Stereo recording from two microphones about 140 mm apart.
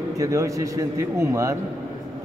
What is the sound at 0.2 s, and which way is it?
A man's voice, 20° right (ahead or behind).